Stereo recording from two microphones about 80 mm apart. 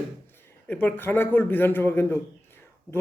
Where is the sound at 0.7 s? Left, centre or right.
Left.